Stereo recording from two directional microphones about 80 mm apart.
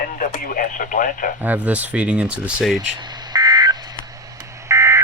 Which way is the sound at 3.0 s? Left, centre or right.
Right.